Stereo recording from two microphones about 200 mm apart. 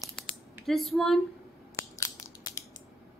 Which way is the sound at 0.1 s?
Centre (ahead or behind).